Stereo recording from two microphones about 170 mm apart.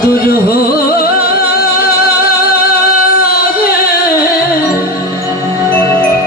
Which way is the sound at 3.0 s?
60° left (ahead or behind).